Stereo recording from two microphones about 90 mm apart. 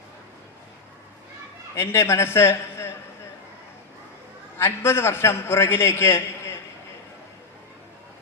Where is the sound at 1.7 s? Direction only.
30° left (ahead or behind).